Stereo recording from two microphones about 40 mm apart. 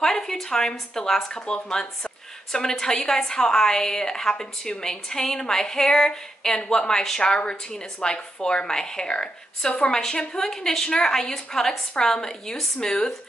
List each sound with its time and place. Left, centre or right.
0.0 s a woman's voice: centre